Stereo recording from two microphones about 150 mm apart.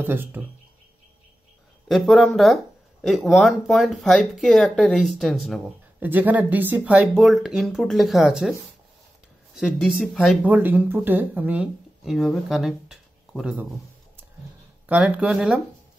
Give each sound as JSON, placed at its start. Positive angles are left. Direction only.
{"t": 0.0, "sound": "speech", "side_deg": -15}
{"t": 1.9, "sound": "speech", "side_deg": 0}
{"t": 5.9, "sound": "speech", "side_deg": -10}
{"t": 9.6, "sound": "speech", "side_deg": -5}
{"t": 10.5, "sound": "speech", "side_deg": -10}
{"t": 14.9, "sound": "speech", "side_deg": -10}